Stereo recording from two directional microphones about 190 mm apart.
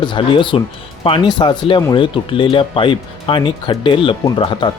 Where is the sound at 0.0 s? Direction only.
25° left (ahead or behind).